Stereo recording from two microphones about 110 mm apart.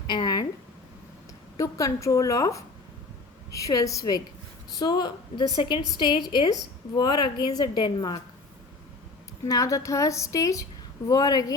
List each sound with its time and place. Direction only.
0.1 s a woman's voice: 40° left (ahead or behind)
1.5 s a woman's voice: 30° left (ahead or behind)
9.5 s a woman's voice: 30° left (ahead or behind)